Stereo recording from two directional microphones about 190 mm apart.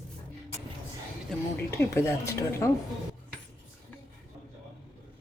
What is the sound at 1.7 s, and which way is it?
A woman's voice, 15° left (ahead or behind).